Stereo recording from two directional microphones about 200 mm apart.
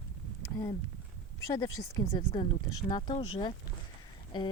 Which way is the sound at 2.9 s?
20° left (ahead or behind).